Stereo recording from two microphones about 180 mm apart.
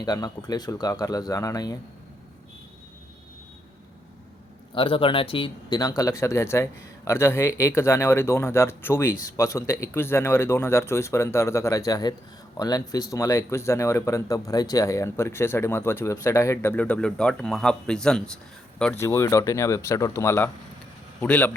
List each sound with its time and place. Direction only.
0.0 s speech: 20° left (ahead or behind)
4.7 s speech: 30° left (ahead or behind); by 21.5 s 10° left (ahead or behind)